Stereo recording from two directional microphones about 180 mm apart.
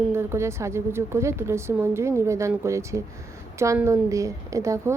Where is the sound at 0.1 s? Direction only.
15° right (ahead or behind).